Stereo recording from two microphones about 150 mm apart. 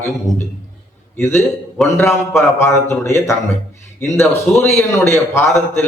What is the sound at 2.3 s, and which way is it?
A man's voice, 15° left (ahead or behind).